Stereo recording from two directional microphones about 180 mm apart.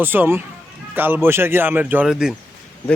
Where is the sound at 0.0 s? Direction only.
10° right (ahead or behind).